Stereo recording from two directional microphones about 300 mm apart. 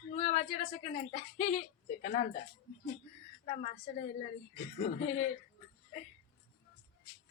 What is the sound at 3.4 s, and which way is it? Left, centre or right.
Speech, left.